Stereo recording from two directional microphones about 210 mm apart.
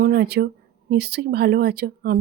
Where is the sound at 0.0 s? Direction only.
50° right (ahead or behind).